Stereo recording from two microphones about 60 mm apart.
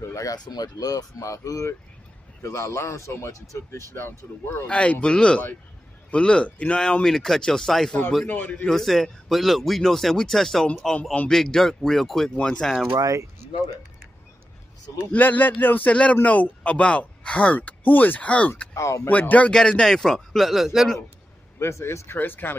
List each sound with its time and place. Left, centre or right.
0.1 s speech: left
2.4 s a man's voice: left
3.9 s speech: left
4.6 s speech: centre
8.3 s speech: left
8.6 s speech: centre
13.0 s speech: right
15.1 s speech: left
15.9 s speech: left
18.8 s speech: left
19.0 s speech: left
19.5 s speech: centre
21.5 s speech: left